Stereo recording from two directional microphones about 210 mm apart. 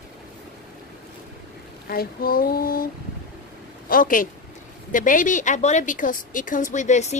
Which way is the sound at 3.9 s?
40° left (ahead or behind).